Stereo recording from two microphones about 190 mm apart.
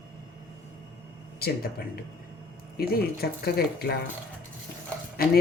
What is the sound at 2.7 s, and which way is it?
Speech, 55° left (ahead or behind).